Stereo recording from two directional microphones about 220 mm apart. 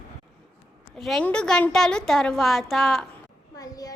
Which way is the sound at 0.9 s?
Centre (ahead or behind).